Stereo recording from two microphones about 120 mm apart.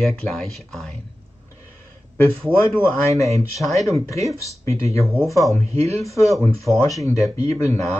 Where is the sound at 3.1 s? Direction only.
25° left (ahead or behind).